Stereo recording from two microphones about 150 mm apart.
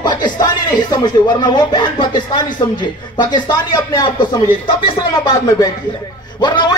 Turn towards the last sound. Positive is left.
turn(degrees=30)  # may be behind; listen again after turning